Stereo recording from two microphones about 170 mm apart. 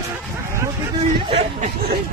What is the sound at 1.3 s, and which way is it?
Speech, 35° right (ahead or behind).